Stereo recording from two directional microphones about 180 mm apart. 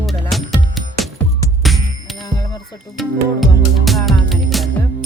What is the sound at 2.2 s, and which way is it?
Speech, 20° left (ahead or behind).